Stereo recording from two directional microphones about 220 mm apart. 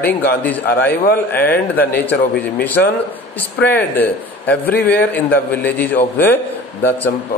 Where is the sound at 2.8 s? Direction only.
50° left (ahead or behind).